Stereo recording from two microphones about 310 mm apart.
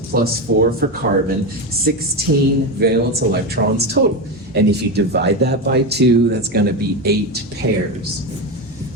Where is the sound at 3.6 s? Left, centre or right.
Right.